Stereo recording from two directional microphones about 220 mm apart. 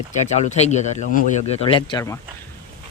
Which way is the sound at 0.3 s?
30° left (ahead or behind).